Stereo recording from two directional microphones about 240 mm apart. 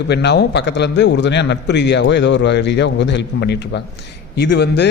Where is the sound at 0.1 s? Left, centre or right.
Left.